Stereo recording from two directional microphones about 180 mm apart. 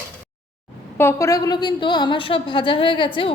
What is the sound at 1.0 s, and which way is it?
A woman's voice, 15° left (ahead or behind).